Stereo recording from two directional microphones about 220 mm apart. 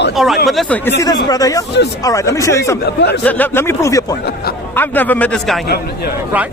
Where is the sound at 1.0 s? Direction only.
15° left (ahead or behind).